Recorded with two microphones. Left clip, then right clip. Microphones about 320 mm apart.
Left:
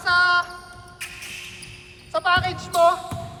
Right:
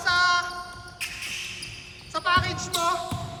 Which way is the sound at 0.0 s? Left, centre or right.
Centre.